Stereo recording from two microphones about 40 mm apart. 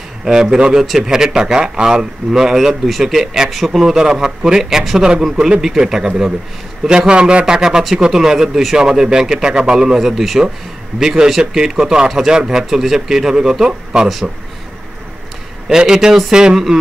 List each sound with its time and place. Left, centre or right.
0.2 s a man's voice: centre
7.0 s a man's voice: right; by 10.4 s centre
11.0 s a man's voice: centre
15.7 s a man's voice: centre